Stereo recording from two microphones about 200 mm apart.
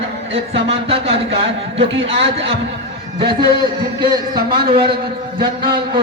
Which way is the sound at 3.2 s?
25° right (ahead or behind).